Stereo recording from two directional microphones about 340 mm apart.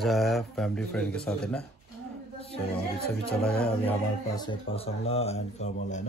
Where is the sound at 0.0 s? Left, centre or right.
Centre.